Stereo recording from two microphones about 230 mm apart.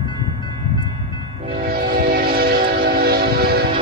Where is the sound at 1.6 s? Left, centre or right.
Right.